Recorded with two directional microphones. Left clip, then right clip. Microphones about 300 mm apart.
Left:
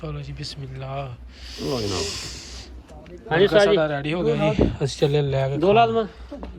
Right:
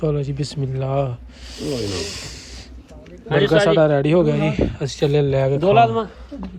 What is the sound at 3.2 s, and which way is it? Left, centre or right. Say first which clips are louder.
Speech: right 1 dB; left.